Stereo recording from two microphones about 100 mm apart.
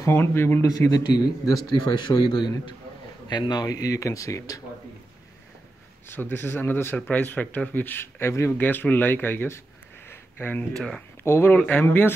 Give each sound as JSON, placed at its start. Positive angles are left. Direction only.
{"t": 0.0, "sound": "speech", "side_deg": 25}
{"t": 0.7, "sound": "a man's voice", "side_deg": 35}
{"t": 6.0, "sound": "speech", "side_deg": 20}
{"t": 10.0, "sound": "a sound", "side_deg": 20}
{"t": 10.7, "sound": "speech", "side_deg": 5}
{"t": 11.2, "sound": "speech", "side_deg": 25}